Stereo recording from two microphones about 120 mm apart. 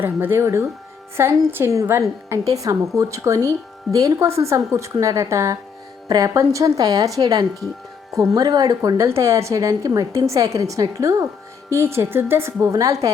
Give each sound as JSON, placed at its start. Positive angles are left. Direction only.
{"t": 0.0, "sound": "a woman's voice", "side_deg": -15}